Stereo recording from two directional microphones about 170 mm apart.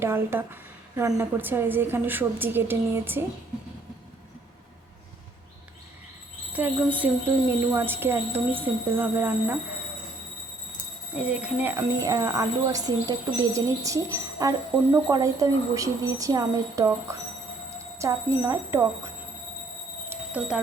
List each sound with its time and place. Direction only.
0.0 s a woman's voice: 15° right (ahead or behind)
6.5 s a woman's voice: 10° right (ahead or behind)
11.1 s a woman's voice: 10° right (ahead or behind)
11.8 s a woman's voice: 20° right (ahead or behind)
20.1 s a sound: 10° right (ahead or behind)